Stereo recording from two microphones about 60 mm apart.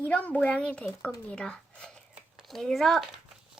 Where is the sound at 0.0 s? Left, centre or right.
Left.